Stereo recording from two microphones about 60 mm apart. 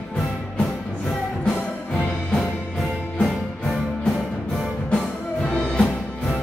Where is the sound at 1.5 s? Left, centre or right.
Centre.